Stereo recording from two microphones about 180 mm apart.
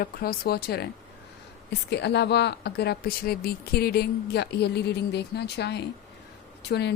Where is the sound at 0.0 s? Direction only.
55° left (ahead or behind).